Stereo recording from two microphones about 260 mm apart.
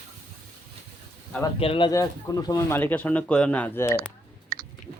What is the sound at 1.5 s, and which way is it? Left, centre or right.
Speech, left.